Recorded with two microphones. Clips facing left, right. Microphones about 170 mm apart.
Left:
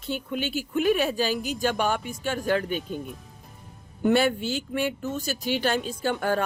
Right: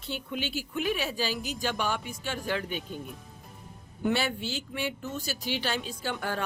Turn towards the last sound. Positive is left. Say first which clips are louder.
# left 7 dB
turn(degrees=50)  # may be behind; listen again after turning